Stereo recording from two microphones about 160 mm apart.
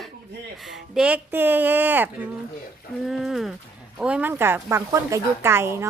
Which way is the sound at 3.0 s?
Centre (ahead or behind).